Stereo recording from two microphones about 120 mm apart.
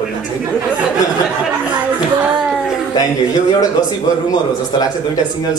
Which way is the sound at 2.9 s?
35° left (ahead or behind).